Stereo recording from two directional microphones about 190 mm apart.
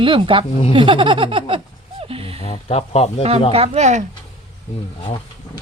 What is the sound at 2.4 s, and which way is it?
Speech, 35° left (ahead or behind).